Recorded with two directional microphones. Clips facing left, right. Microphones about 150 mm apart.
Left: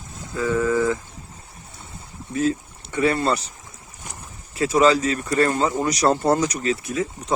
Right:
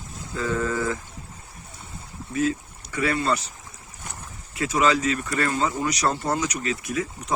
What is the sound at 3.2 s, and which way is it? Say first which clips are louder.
Speech: left 2 dB; 35° left (ahead or behind).